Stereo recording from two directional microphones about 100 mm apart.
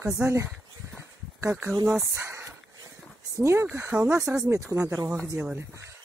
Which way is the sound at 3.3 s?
25° right (ahead or behind).